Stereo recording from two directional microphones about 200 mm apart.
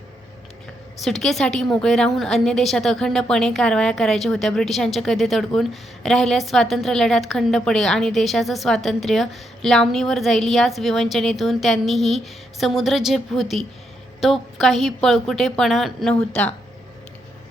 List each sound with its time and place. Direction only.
1.0 s a woman's voice: centre (ahead or behind)